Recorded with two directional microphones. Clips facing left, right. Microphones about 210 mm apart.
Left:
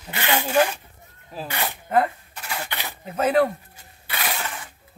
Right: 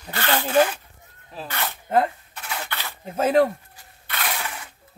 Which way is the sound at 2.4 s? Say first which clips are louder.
Left 1 dB; 5° left (ahead or behind).